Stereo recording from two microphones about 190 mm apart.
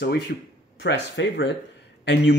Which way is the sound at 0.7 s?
70° left (ahead or behind).